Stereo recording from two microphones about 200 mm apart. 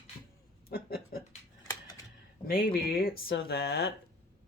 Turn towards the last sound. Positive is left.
turn(degrees=50)  # may be behind; listen again after turning